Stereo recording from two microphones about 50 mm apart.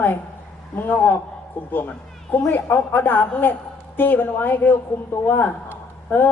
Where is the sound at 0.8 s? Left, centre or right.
Left.